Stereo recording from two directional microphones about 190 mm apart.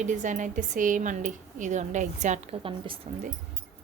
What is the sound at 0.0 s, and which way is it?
A woman's voice, 40° right (ahead or behind).